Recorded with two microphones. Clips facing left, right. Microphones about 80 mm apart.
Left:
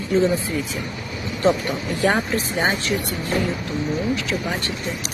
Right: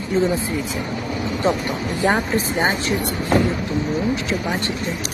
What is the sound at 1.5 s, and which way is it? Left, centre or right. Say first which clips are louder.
Speech: left 3 dB; right.